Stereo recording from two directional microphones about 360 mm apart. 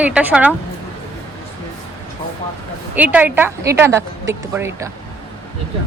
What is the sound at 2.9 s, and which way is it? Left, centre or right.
A woman's voice, centre.